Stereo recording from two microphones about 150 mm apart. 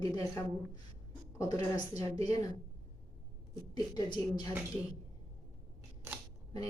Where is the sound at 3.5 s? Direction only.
25° left (ahead or behind).